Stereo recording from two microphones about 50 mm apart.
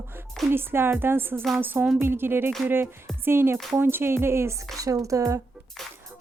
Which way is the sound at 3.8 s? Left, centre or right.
Right.